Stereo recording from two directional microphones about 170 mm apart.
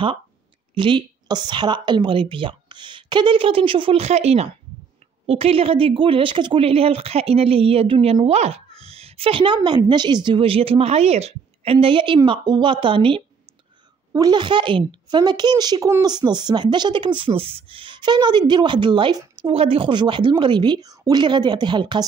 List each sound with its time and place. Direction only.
0.7 s a woman's voice: 30° right (ahead or behind)